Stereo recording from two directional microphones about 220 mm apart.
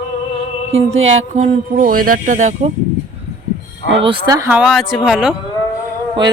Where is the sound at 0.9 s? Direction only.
60° right (ahead or behind).